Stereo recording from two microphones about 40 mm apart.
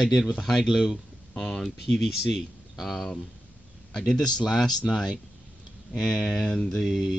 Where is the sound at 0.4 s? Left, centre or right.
Centre.